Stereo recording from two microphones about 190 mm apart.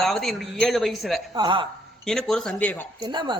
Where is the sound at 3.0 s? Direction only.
25° right (ahead or behind).